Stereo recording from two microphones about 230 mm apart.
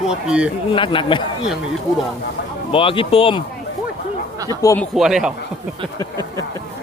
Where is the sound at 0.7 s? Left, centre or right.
Left.